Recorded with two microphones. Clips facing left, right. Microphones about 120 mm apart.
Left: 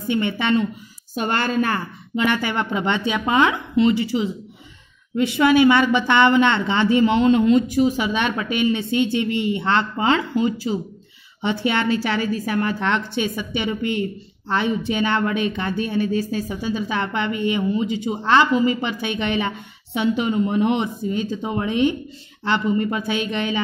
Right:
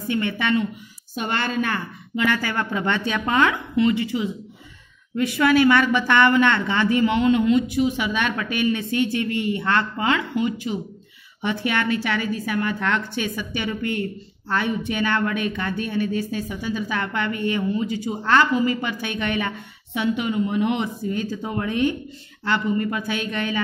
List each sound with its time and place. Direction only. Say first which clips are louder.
0.1 s a woman's voice: left 2 dB; 25° left (ahead or behind)
1.1 s a woman's voice: left 3 dB; 40° left (ahead or behind)
2.1 s a woman's voice: left 2 dB; 25° left (ahead or behind)